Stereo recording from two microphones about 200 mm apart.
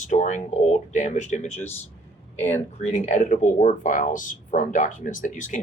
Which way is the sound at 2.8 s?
35° left (ahead or behind).